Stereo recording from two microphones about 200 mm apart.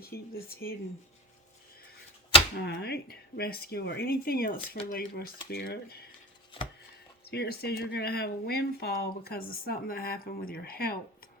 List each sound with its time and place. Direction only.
0.1 s speech: 50° left (ahead or behind)
2.6 s speech: 55° left (ahead or behind)
7.3 s speech: 55° left (ahead or behind)